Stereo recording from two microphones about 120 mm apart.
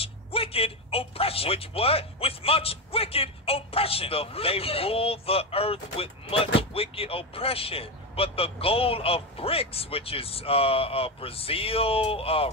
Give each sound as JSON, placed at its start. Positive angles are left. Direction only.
{"t": 0.0, "sound": "speech", "side_deg": 50}